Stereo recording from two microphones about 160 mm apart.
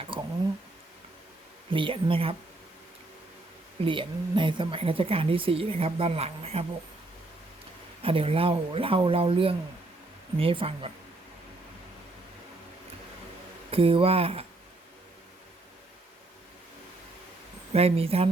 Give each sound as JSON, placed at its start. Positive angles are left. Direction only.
{"t": 0.1, "sound": "a sound", "side_deg": -30}
{"t": 1.7, "sound": "a woman's voice", "side_deg": -35}
{"t": 3.8, "sound": "a woman's voice", "side_deg": -30}
{"t": 8.0, "sound": "a woman's voice", "side_deg": -35}
{"t": 13.7, "sound": "a woman's voice", "side_deg": -35}
{"t": 17.7, "sound": "a woman's voice", "side_deg": -40}